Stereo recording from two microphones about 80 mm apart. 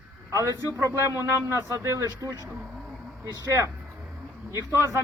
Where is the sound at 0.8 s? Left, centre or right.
Right.